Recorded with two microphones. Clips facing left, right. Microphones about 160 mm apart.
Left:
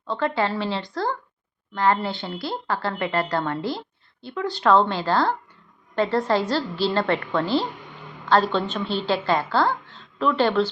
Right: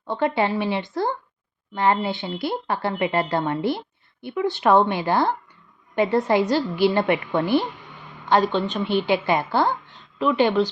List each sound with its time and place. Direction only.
0.1 s a woman's voice: 20° right (ahead or behind)